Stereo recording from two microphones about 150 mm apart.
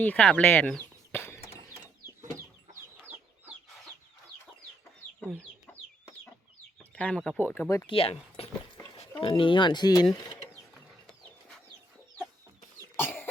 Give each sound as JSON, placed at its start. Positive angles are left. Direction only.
{"t": 0.0, "sound": "speech", "side_deg": 10}
{"t": 1.1, "sound": "a sound", "side_deg": 15}
{"t": 6.7, "sound": "chicken", "side_deg": 10}
{"t": 7.3, "sound": "speech", "side_deg": 15}
{"t": 7.9, "sound": "speech", "side_deg": 40}